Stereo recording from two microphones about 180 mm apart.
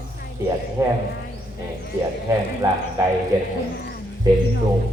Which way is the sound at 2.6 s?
15° right (ahead or behind).